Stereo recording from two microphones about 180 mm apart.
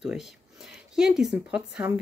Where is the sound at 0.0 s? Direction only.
5° right (ahead or behind).